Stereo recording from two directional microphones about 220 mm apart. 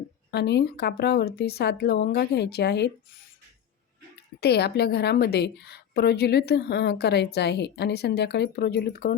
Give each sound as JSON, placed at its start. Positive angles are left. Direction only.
{"t": 0.3, "sound": "a woman's voice", "side_deg": 50}
{"t": 4.4, "sound": "a woman's voice", "side_deg": 45}